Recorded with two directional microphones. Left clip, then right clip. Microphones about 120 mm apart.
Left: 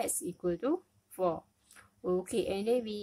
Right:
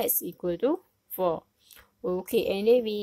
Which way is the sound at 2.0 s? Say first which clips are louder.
Right 5 dB; 10° right (ahead or behind).